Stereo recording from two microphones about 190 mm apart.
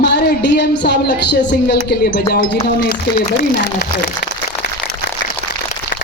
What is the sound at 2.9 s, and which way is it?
Speech, 50° left (ahead or behind).